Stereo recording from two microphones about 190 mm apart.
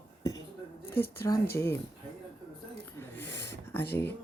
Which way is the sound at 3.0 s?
10° left (ahead or behind).